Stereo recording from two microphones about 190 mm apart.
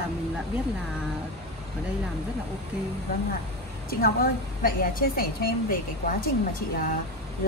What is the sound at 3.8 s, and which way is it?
A woman's voice, 50° left (ahead or behind).